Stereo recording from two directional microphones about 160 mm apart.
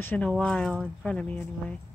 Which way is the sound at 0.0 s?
10° left (ahead or behind).